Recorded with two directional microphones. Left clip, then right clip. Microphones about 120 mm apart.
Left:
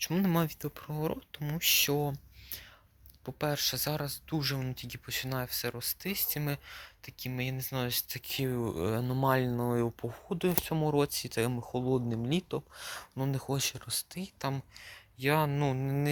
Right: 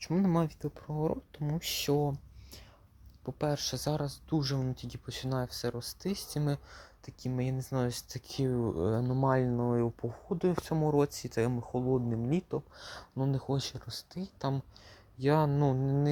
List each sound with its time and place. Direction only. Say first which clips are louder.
0.0 s speech: even; 5° right (ahead or behind)
0.9 s speech: right 2 dB; 15° right (ahead or behind)
12.7 s speech: left 1 dB; 20° right (ahead or behind)
14.3 s speech: even; 30° right (ahead or behind)